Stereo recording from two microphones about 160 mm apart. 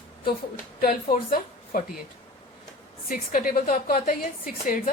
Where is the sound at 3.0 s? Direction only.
60° left (ahead or behind).